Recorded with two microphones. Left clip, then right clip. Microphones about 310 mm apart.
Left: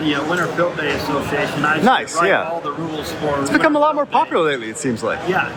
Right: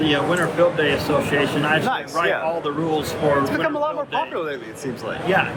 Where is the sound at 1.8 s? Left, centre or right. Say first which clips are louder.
Left 6 dB; left.